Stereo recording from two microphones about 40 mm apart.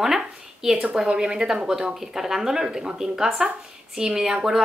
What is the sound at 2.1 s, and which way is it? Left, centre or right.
Speech, centre.